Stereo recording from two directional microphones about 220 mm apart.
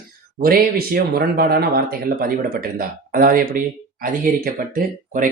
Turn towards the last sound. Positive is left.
turn(degrees=-40)  # may be behind; listen again after turning